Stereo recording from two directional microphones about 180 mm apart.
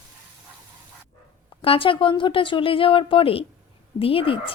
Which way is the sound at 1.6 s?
30° left (ahead or behind).